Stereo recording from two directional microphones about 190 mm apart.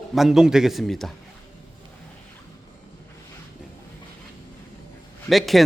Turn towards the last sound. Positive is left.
turn(degrees=0)  # may be behind; listen again after turning